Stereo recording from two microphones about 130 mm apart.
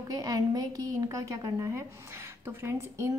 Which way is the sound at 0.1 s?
30° right (ahead or behind).